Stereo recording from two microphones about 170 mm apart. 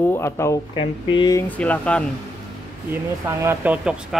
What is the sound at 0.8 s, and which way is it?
Speech, 30° left (ahead or behind).